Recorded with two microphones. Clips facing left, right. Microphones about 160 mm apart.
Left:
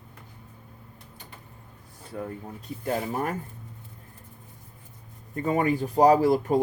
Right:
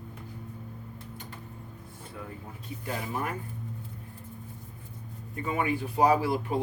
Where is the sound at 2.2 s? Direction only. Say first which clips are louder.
Left 8 dB; 45° left (ahead or behind).